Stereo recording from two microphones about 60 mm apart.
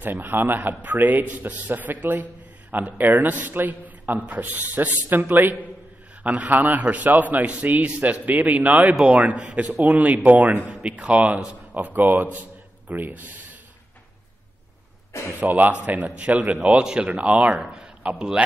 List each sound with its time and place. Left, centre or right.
0.0 s a man's voice: right; by 11.5 s centre
11.7 s a man's voice: right
15.3 s a man's voice: right; by 18.4 s centre